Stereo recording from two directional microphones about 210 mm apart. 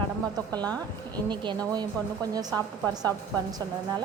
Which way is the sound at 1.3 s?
20° right (ahead or behind).